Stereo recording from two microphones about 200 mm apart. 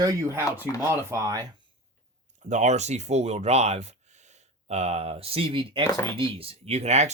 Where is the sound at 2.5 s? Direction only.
35° right (ahead or behind).